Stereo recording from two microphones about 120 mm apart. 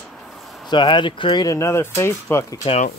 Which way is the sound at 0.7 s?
40° left (ahead or behind).